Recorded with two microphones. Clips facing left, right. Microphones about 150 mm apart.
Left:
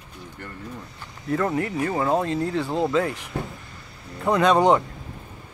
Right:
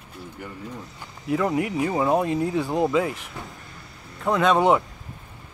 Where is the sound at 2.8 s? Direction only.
5° right (ahead or behind).